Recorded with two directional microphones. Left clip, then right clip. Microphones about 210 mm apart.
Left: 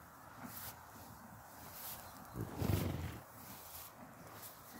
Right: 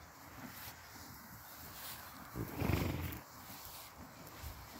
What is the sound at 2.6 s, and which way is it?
Horse, 25° left (ahead or behind).